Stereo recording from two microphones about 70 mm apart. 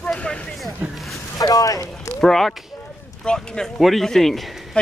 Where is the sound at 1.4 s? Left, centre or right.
Left.